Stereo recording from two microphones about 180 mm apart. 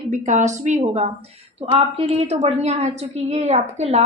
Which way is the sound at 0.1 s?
45° right (ahead or behind).